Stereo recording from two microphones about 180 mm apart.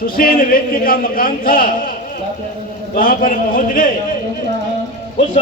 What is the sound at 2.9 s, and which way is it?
A man's voice, 50° left (ahead or behind).